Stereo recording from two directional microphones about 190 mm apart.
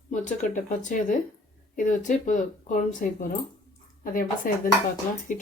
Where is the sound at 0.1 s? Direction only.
40° left (ahead or behind).